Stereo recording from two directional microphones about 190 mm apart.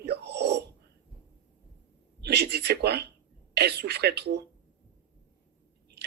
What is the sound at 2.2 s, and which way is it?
Speech, 60° right (ahead or behind).